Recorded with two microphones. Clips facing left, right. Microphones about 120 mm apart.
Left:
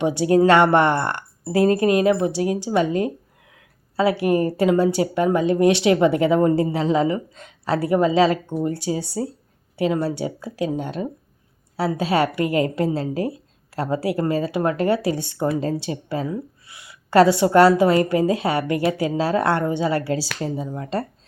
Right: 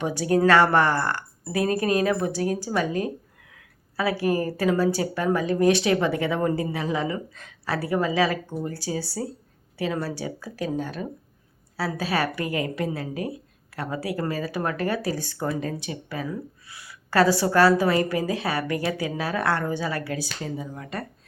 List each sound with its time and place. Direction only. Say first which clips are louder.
0.0 s speech: left 5 dB; 25° left (ahead or behind)